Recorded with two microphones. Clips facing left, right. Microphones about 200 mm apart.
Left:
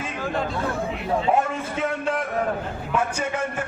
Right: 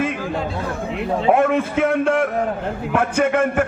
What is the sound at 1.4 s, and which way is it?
A man's voice, 65° right (ahead or behind).